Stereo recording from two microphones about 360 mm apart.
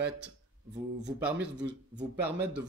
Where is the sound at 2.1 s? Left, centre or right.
Centre.